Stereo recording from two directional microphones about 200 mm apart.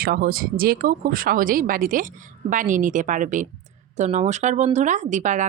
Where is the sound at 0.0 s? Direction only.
50° right (ahead or behind).